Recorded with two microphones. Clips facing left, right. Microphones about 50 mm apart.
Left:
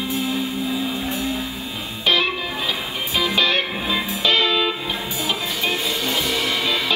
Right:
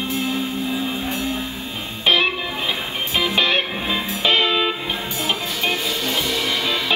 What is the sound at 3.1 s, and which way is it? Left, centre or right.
Music, centre.